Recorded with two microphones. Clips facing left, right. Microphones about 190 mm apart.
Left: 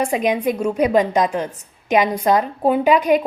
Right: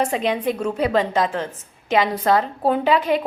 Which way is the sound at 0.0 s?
10° left (ahead or behind).